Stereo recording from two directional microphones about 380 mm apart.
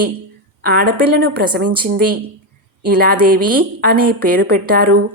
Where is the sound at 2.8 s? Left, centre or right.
Right.